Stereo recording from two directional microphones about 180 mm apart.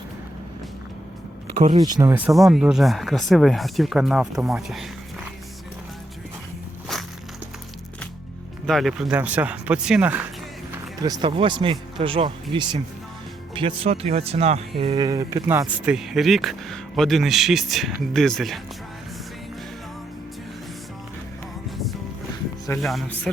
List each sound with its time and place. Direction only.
1.7 s speech: 20° right (ahead or behind)
2.1 s speech: 5° right (ahead or behind)
6.9 s walk: centre (ahead or behind)
8.6 s speech: centre (ahead or behind)
11.0 s speech: 25° right (ahead or behind)
15.9 s speech: centre (ahead or behind)
22.8 s speech: centre (ahead or behind)